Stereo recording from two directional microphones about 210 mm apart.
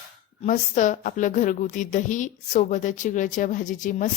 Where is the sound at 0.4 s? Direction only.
35° left (ahead or behind).